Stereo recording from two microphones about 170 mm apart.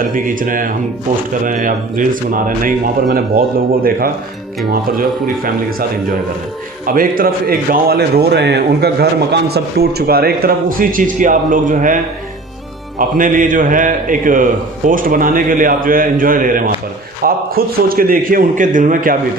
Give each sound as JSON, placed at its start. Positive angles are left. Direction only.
{"t": 0.0, "sound": "a man's voice", "side_deg": -55}
{"t": 6.8, "sound": "speech", "side_deg": -55}
{"t": 13.0, "sound": "a man's voice", "side_deg": -55}